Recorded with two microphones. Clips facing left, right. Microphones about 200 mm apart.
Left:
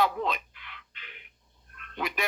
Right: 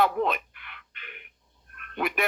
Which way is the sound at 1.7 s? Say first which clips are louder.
Right 4 dB; 55° right (ahead or behind).